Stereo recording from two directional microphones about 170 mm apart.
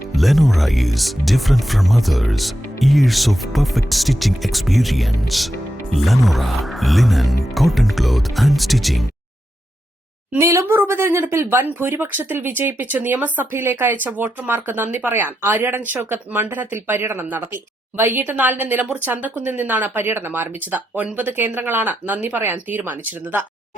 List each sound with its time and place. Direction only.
0.1 s speech: centre (ahead or behind)
10.4 s speech: 15° right (ahead or behind)